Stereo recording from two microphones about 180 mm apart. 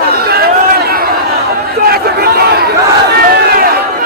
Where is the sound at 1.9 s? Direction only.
60° right (ahead or behind).